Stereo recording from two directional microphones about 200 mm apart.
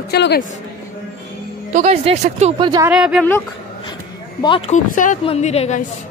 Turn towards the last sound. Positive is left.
turn(degrees=35)  # may be behind; listen again after turning